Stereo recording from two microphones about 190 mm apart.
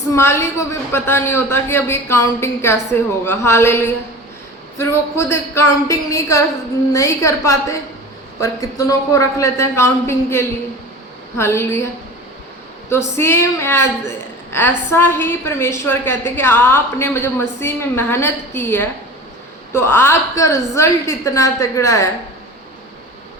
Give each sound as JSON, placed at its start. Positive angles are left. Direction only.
{"t": 0.1, "sound": "a woman's voice", "side_deg": 15}
{"t": 12.9, "sound": "a woman's voice", "side_deg": 15}
{"t": 14.9, "sound": "a woman's voice", "side_deg": 10}